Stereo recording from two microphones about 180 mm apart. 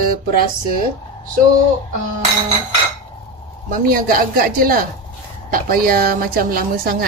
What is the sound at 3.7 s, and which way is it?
A woman's voice, 50° right (ahead or behind).